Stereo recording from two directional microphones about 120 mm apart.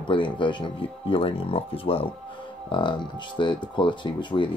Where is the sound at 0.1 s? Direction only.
45° left (ahead or behind).